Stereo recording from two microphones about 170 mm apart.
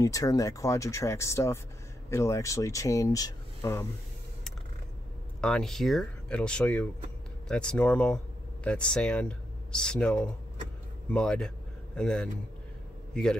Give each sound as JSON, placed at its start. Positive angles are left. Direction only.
{"t": 0.0, "sound": "speech", "side_deg": 20}
{"t": 5.4, "sound": "a man's voice", "side_deg": 5}